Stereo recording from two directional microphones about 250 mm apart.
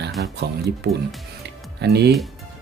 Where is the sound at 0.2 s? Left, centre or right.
Right.